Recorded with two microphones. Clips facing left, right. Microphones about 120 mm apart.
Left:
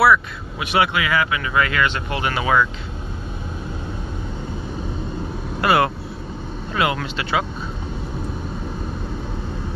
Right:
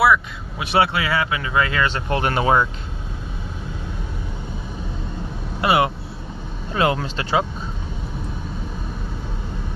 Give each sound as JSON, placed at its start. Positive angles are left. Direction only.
{"t": 0.0, "sound": "speech", "side_deg": -20}
{"t": 0.7, "sound": "speech", "side_deg": -30}
{"t": 5.6, "sound": "speech", "side_deg": -20}
{"t": 6.7, "sound": "speech", "side_deg": -30}